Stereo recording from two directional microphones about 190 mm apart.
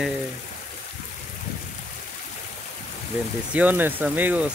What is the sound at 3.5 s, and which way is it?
Speech, 10° right (ahead or behind).